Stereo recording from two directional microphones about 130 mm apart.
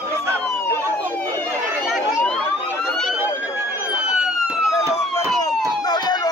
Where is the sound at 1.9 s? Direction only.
Centre (ahead or behind).